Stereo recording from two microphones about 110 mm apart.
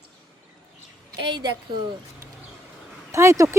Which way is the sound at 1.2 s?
45° right (ahead or behind).